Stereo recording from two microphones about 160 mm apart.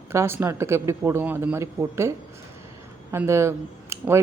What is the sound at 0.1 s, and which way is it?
Speech, 15° right (ahead or behind).